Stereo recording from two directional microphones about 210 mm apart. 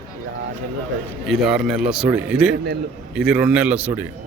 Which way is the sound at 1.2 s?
Centre (ahead or behind).